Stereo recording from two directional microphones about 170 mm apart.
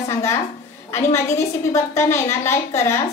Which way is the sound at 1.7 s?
15° left (ahead or behind).